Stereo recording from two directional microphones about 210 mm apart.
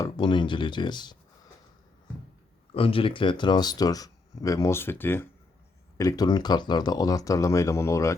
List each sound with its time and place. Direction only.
0.0 s speech: 20° left (ahead or behind)
2.7 s speech: 25° left (ahead or behind)